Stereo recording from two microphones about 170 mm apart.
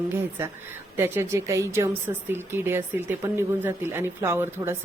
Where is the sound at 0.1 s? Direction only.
10° right (ahead or behind).